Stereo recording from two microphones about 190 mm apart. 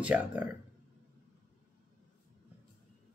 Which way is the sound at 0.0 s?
5° right (ahead or behind).